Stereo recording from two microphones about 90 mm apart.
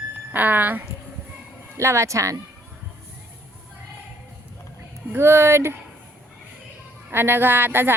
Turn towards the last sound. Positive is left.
turn(degrees=-25)  # may be behind; listen again after turning